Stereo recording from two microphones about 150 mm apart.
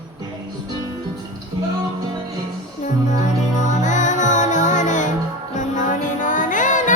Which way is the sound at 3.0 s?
55° left (ahead or behind).